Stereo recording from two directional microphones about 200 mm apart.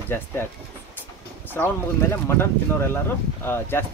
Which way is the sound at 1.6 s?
10° left (ahead or behind).